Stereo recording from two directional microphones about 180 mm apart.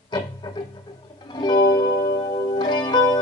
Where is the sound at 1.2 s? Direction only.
25° left (ahead or behind).